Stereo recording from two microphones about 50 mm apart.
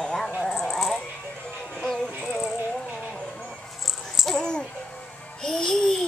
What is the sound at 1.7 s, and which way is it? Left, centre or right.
Music, centre.